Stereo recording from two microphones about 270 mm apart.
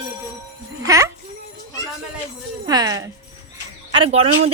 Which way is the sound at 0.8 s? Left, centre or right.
Centre.